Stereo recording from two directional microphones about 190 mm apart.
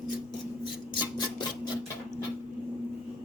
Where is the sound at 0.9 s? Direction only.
25° left (ahead or behind).